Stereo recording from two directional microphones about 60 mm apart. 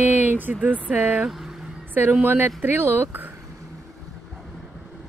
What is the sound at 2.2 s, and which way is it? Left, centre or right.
A woman's voice, right.